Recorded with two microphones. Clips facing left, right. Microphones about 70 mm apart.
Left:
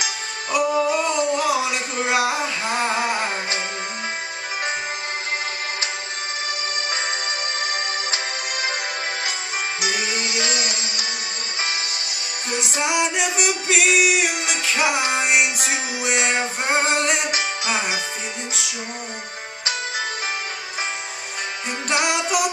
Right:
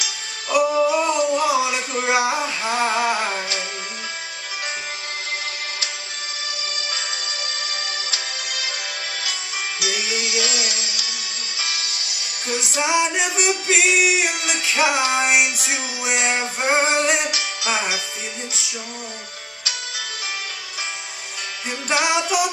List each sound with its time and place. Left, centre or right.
0.5 s music: centre
8.1 s music: left
9.8 s music: left
12.4 s music: left
12.8 s music: centre
21.8 s music: centre